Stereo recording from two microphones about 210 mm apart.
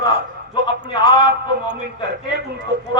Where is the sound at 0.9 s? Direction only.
20° left (ahead or behind).